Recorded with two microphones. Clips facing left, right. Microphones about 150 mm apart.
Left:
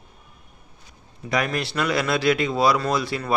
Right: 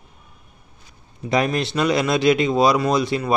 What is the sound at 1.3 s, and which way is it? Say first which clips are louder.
Speech: right 4 dB; 25° right (ahead or behind).